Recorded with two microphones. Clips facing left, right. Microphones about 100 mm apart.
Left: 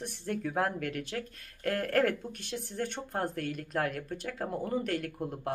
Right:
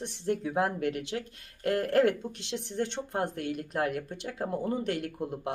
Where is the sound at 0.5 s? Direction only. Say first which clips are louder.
Right 1 dB; 20° right (ahead or behind).